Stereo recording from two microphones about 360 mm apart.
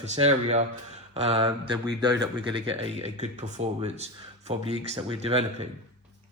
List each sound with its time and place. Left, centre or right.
0.0 s speech: centre